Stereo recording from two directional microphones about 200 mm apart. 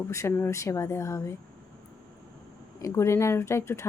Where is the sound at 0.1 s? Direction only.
15° left (ahead or behind).